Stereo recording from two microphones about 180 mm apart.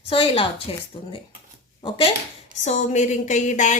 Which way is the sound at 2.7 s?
40° left (ahead or behind).